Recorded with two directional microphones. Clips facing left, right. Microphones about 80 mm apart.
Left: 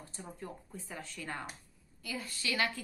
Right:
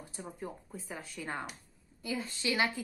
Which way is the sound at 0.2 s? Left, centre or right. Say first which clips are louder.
Right 3 dB; centre.